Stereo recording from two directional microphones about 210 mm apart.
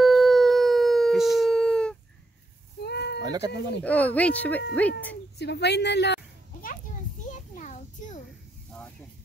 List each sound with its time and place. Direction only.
0.0 s howl: centre (ahead or behind)
2.8 s bleat: 50° left (ahead or behind)
3.2 s chicken: 20° right (ahead or behind)
3.8 s speech: 5° left (ahead or behind)
5.4 s a sound: 55° left (ahead or behind)
6.7 s children playing: 35° left (ahead or behind)